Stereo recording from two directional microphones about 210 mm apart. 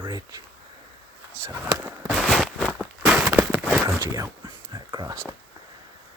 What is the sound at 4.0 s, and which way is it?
Speech, 15° right (ahead or behind).